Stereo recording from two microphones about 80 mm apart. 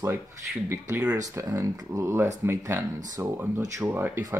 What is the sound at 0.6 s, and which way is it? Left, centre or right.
Speech, right.